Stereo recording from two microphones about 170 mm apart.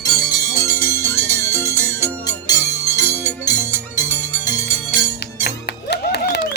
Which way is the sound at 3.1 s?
15° right (ahead or behind).